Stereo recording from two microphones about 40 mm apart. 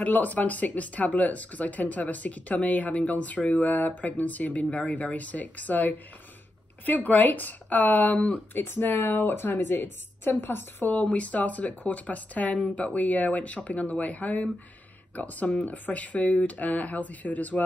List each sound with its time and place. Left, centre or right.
0.0 s speech: left
8.5 s a woman's voice: left
10.9 s speech: left